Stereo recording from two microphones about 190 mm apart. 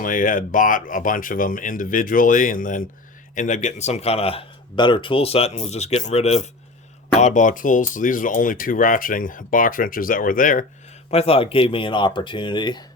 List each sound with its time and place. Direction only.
0.0 s speech: 45° left (ahead or behind)
11.1 s speech: 30° left (ahead or behind)